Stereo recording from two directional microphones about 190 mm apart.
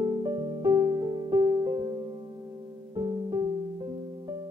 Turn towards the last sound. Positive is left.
turn(degrees=-20)  # may be behind; listen again after turning